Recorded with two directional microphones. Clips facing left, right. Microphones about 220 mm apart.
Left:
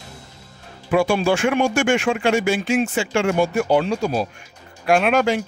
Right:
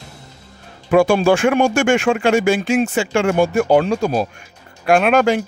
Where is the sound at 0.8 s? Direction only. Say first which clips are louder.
Right 5 dB; 45° right (ahead or behind).